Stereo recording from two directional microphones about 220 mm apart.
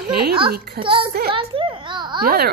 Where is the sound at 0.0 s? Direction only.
45° right (ahead or behind).